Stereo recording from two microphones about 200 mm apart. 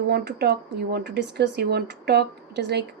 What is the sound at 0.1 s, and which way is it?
Speech, 55° right (ahead or behind).